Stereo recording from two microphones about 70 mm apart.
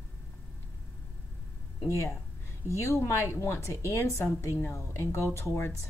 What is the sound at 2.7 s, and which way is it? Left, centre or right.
A woman's voice, left.